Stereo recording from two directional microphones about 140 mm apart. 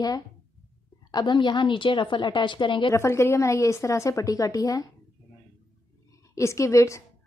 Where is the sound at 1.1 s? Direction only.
35° left (ahead or behind).